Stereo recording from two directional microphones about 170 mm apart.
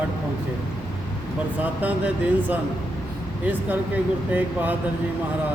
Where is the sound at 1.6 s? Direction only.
10° right (ahead or behind).